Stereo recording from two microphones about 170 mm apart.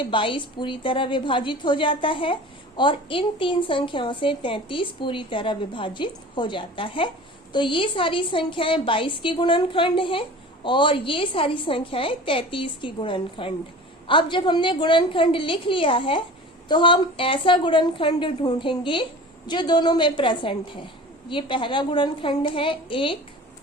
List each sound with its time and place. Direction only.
0.0 s a woman's voice: 30° left (ahead or behind)